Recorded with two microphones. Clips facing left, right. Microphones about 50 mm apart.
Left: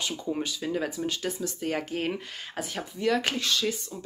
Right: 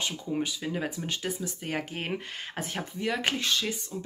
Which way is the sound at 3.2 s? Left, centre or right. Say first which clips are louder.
Left 1 dB; right.